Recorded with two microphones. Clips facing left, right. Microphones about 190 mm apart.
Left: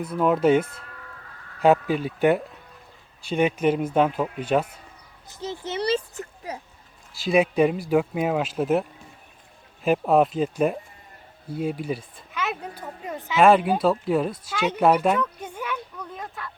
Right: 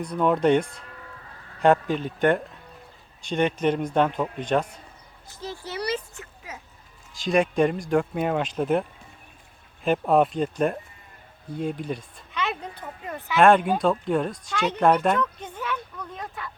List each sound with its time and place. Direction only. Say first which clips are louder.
0.0 s speech: left 1 dB; 5° left (ahead or behind)
5.3 s a child's voice: left 4 dB; 20° left (ahead or behind)
6.1 s a sound: left 7 dB; 35° left (ahead or behind)
7.1 s speech: left 2 dB; 5° left (ahead or behind)
13.4 s speech: left 1 dB; 5° left (ahead or behind)